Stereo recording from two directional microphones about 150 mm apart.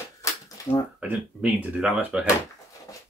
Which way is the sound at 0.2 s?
20° left (ahead or behind).